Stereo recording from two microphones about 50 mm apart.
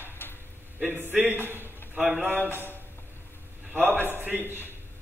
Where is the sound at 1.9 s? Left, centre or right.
Right.